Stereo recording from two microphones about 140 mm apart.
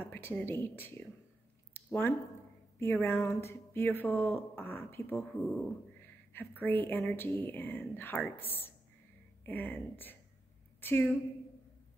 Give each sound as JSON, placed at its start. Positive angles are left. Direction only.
{"t": 0.0, "sound": "speech", "side_deg": 15}
{"t": 1.7, "sound": "a sound", "side_deg": 15}
{"t": 2.8, "sound": "a woman's voice", "side_deg": 20}